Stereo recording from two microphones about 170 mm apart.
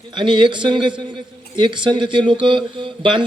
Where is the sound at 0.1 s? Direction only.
30° right (ahead or behind).